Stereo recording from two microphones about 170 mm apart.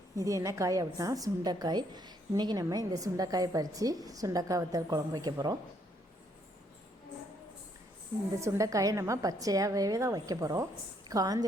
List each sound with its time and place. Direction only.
0.2 s a woman's voice: 20° right (ahead or behind)
8.4 s a woman's voice: 20° right (ahead or behind)